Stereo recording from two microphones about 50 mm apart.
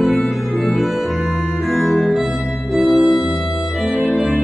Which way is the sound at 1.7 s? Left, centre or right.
Centre.